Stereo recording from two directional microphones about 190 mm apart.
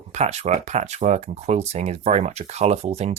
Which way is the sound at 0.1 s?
35° right (ahead or behind).